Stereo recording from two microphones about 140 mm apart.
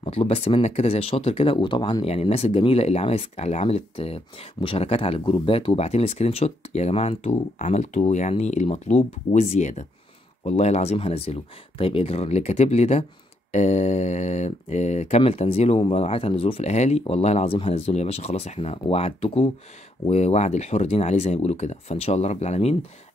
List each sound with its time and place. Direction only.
0.0 s speech: 45° left (ahead or behind)